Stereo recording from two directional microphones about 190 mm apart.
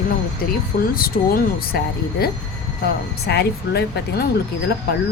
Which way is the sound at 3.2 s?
60° left (ahead or behind).